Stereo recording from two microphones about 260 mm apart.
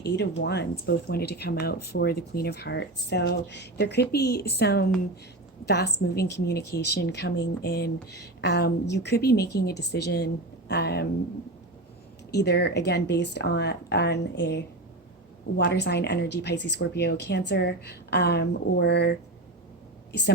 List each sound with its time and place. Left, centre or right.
0.2 s speech: left
12.3 s speech: left